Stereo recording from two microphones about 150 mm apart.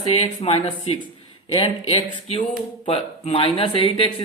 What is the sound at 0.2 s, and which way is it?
Speech, 40° left (ahead or behind).